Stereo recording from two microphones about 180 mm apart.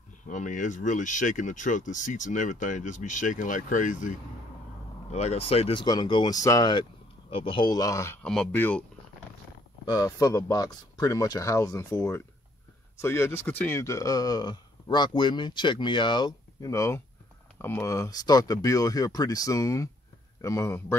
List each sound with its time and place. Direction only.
0.3 s speech: 45° left (ahead or behind); by 8.8 s 10° left (ahead or behind)
9.8 s speech: 20° left (ahead or behind)